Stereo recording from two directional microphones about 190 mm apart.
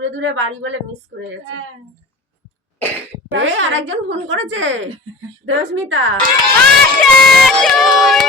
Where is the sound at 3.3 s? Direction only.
80° right.